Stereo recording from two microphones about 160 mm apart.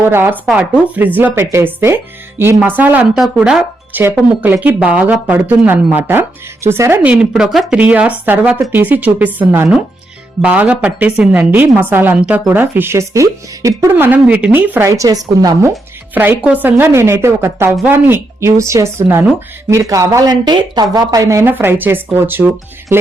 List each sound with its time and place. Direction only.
0.0 s speech: 15° right (ahead or behind)
16.1 s speech: 10° right (ahead or behind)